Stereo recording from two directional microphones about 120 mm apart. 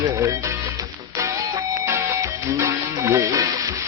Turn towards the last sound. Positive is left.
turn(degrees=-25)  # may be behind; listen again after turning